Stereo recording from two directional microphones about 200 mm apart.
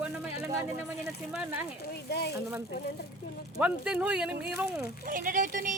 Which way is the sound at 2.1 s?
55° left (ahead or behind).